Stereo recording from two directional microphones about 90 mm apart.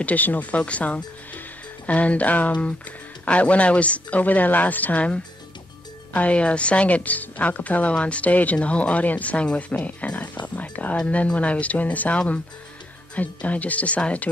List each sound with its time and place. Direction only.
0.0 s a woman's voice: 20° left (ahead or behind)